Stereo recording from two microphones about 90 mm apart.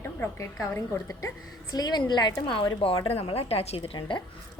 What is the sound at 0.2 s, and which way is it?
Speech, 25° left (ahead or behind).